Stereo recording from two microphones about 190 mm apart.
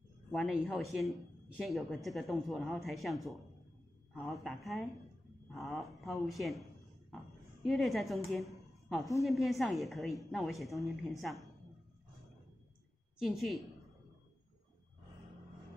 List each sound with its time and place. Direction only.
0.3 s speech: centre (ahead or behind)
7.6 s speech: centre (ahead or behind)
8.8 s a sound: centre (ahead or behind)
9.2 s speech: centre (ahead or behind)
13.2 s speech: centre (ahead or behind)